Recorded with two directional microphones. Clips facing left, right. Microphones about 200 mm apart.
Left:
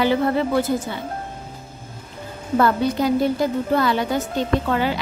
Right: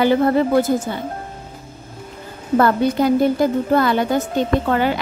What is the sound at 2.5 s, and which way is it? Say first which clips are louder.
Speech: right 3 dB; 50° right (ahead or behind).